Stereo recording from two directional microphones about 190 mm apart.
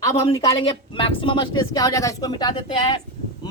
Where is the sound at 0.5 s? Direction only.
30° left (ahead or behind).